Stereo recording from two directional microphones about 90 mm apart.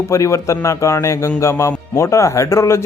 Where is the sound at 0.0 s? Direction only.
35° left (ahead or behind).